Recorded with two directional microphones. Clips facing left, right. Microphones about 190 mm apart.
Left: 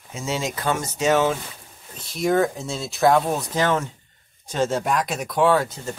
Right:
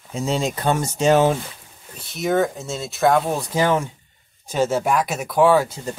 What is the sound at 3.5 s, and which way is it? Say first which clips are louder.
Speech: right 4 dB; 10° right (ahead or behind).